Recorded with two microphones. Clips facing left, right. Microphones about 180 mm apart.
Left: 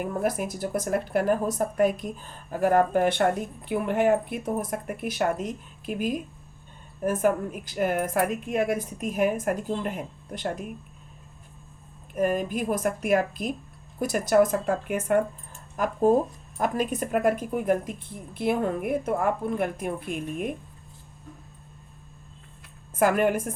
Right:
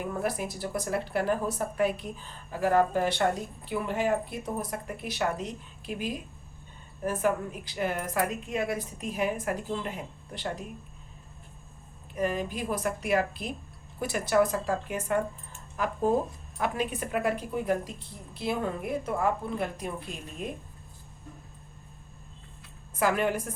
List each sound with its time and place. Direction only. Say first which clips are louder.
0.0 s speech: left 4 dB; 50° left (ahead or behind)
12.1 s speech: left 5 dB; 50° left (ahead or behind)
15.5 s keys jangling: left 4 dB; 45° left (ahead or behind)
16.6 s speech: left 4 dB; 45° left (ahead or behind)
23.0 s speech: left 5 dB; 50° left (ahead or behind)